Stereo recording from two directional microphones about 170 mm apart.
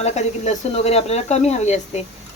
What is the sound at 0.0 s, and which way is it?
Speech, 40° left (ahead or behind).